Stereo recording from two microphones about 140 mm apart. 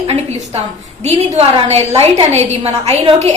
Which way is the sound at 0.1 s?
50° right (ahead or behind).